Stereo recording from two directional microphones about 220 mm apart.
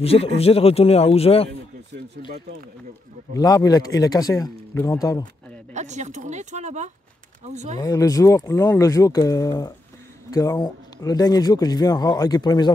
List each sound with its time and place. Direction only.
0.0 s speech: 25° left (ahead or behind)
3.3 s speech: 15° left (ahead or behind)
5.8 s speech: 30° right (ahead or behind)
7.7 s speech: 15° left (ahead or behind)